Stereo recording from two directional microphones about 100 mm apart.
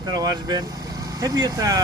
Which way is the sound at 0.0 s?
45° right (ahead or behind).